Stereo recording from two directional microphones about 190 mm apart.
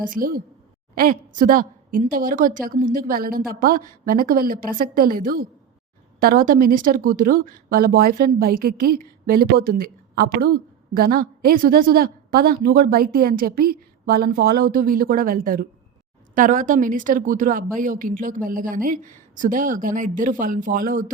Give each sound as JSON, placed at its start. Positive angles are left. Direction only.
{"t": 0.1, "sound": "speech", "side_deg": -45}